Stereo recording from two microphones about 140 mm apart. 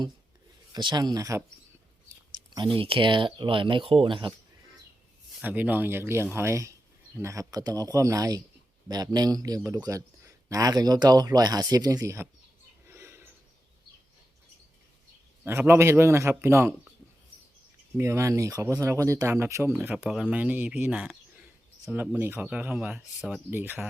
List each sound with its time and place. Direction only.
0.7 s speech: 30° right (ahead or behind)
2.7 s speech: 40° right (ahead or behind)
5.4 s speech: 10° right (ahead or behind)
12.9 s a sound: 20° right (ahead or behind)
15.4 s speech: 15° right (ahead or behind)
17.9 s speech: 20° right (ahead or behind); by 23.4 s 5° right (ahead or behind)
23.5 s speech: 15° right (ahead or behind)